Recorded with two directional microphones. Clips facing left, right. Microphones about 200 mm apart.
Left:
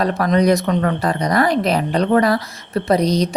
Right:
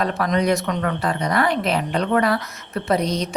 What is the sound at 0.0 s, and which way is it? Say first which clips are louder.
Speech: left 5 dB; 40° left (ahead or behind).